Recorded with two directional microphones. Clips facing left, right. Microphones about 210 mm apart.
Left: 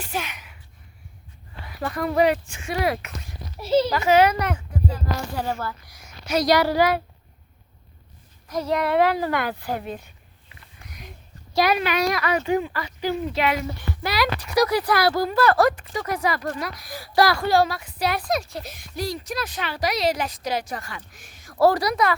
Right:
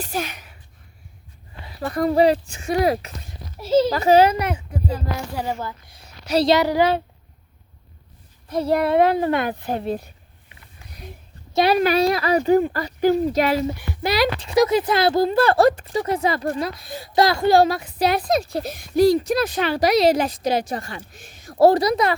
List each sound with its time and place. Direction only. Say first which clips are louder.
0.0 s a sound: right 3 dB; 40° right (ahead or behind)
1.6 s speech: right 5 dB; 35° right (ahead or behind)
4.4 s speech: right 1 dB; 10° right (ahead or behind)
8.4 s speech: right 4 dB; 30° right (ahead or behind)
10.5 s a sound: even; 30° right (ahead or behind)
11.5 s speech: right 4 dB; 30° right (ahead or behind)
13.7 s speech: right 5 dB; 20° right (ahead or behind)